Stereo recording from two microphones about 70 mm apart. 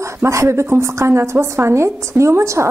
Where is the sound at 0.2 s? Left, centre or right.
Right.